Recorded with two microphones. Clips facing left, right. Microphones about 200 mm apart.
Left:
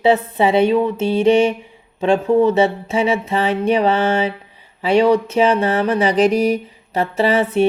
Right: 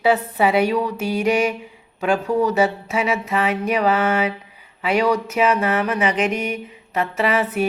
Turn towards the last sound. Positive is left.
turn(degrees=30)  # may be behind; listen again after turning